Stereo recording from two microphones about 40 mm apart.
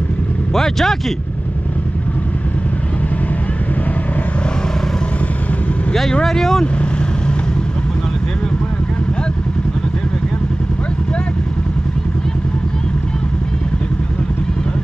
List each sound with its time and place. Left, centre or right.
0.6 s speech: centre
6.2 s speech: centre
6.6 s vehicle: left